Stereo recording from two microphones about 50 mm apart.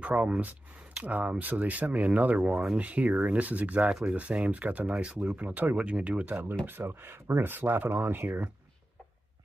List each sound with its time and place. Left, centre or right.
0.0 s speech: right
6.2 s speech: right